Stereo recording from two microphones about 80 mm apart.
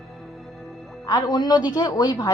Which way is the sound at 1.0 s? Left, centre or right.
Left.